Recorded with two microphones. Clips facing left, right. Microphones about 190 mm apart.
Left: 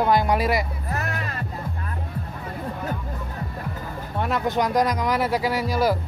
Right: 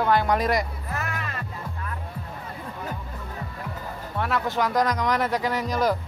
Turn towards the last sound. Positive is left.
turn(degrees=10)  # may be behind; listen again after turning